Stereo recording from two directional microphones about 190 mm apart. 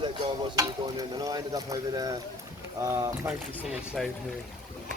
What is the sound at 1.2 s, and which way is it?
Speech, 20° right (ahead or behind).